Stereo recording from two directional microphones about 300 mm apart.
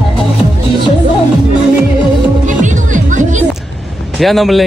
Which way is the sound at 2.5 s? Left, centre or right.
Right.